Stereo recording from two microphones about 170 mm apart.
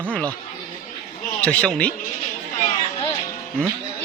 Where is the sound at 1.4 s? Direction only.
5° left (ahead or behind).